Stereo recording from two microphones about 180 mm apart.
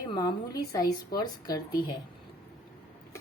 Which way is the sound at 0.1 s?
25° left (ahead or behind).